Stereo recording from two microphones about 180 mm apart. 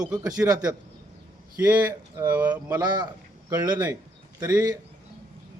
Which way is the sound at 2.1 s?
15° right (ahead or behind).